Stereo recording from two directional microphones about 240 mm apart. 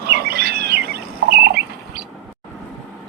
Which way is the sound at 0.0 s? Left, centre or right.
Right.